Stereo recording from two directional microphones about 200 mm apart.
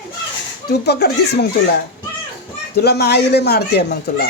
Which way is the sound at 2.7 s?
55° left (ahead or behind).